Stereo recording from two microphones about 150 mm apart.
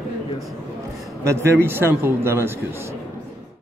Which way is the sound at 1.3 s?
20° right (ahead or behind).